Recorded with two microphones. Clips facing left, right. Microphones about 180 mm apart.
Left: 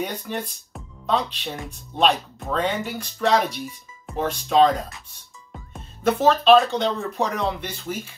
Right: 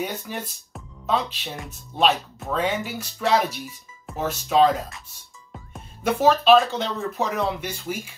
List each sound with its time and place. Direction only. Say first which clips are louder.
0.0 s speech: left 2 dB; 5° right (ahead or behind)